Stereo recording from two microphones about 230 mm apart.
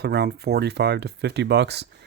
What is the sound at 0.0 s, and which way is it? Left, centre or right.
Speech, right.